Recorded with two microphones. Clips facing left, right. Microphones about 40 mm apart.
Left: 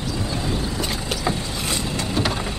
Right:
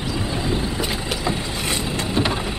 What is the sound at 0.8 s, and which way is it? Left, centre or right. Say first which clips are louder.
Boat: right 1 dB; centre.